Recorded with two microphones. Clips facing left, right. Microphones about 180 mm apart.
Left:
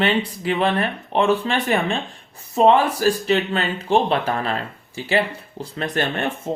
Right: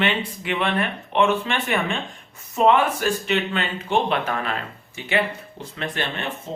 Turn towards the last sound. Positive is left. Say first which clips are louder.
# left 5 dB
turn(degrees=50)  # may be behind; listen again after turning